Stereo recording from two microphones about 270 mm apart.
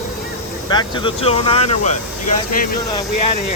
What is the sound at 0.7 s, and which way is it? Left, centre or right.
Speech, centre.